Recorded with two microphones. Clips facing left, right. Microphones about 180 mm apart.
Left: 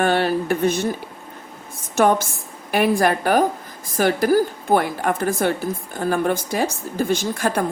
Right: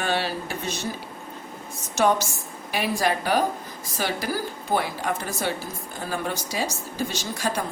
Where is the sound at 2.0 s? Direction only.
55° left (ahead or behind).